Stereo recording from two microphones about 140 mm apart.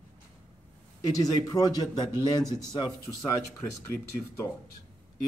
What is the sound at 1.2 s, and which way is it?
Speech, 25° left (ahead or behind).